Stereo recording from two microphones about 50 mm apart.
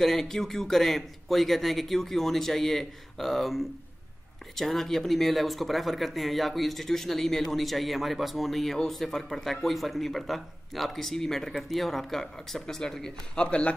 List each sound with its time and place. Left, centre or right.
0.0 s a man's voice: centre